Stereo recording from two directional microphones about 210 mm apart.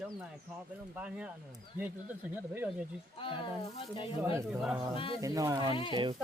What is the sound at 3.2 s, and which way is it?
Speech, 25° left (ahead or behind).